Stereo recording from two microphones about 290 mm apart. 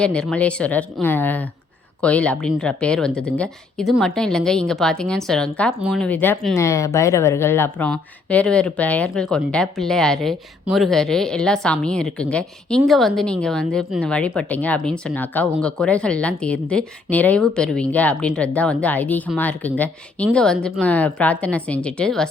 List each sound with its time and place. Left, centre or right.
0.0 s speech: centre